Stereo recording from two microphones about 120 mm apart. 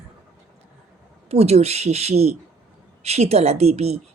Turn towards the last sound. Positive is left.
turn(degrees=-60)  # may be behind; listen again after turning